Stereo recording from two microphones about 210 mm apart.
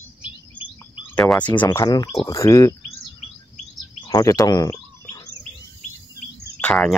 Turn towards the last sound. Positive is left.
turn(degrees=5)  # may be behind; listen again after turning